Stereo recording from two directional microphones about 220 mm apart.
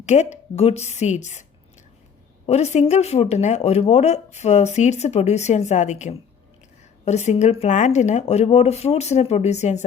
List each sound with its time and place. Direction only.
0.0 s speech: 30° left (ahead or behind)
2.5 s speech: 30° left (ahead or behind)